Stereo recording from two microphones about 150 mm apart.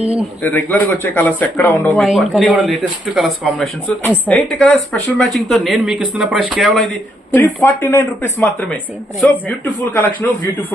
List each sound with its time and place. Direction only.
0.0 s speech: 40° right (ahead or behind)
0.4 s speech: 10° left (ahead or behind)
2.0 s speech: centre (ahead or behind)
7.3 s speech: 15° left (ahead or behind)